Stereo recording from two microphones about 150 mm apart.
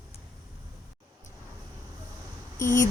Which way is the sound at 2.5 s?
20° left (ahead or behind).